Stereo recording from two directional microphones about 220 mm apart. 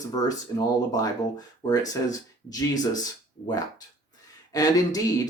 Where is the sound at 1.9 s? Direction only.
15° left (ahead or behind).